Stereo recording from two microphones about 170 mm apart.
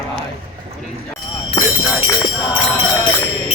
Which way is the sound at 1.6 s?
25° left (ahead or behind).